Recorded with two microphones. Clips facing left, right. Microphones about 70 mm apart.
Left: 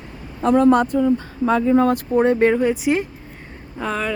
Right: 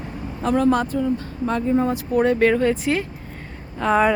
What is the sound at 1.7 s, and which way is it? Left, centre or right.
Speech, left.